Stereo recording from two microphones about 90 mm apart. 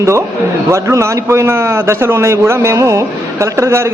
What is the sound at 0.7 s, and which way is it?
A man's voice, 30° right (ahead or behind).